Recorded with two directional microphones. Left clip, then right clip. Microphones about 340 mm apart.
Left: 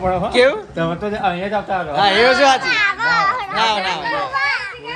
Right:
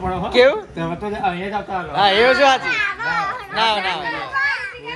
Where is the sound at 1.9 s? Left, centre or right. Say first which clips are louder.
Left 1 dB; centre.